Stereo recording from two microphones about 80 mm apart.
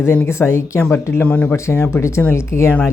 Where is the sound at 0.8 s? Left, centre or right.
Left.